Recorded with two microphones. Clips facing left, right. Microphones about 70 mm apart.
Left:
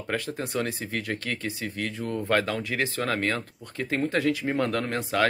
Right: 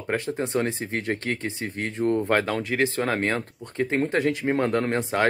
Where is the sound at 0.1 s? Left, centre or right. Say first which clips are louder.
Right 4 dB; right.